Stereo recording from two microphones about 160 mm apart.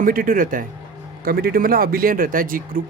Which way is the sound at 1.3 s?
70° right (ahead or behind).